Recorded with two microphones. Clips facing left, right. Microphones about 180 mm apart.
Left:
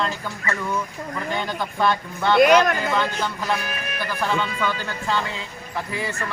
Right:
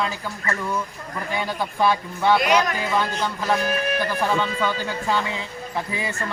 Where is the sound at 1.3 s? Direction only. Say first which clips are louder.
Right 2 dB; 10° right (ahead or behind).